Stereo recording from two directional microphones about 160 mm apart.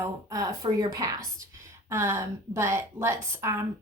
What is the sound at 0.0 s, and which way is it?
A woman's voice, 20° right (ahead or behind).